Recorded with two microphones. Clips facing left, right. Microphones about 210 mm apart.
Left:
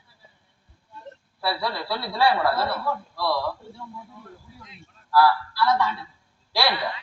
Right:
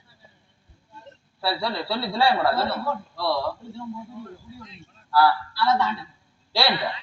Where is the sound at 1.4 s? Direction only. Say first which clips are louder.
Right 1 dB; 25° right (ahead or behind).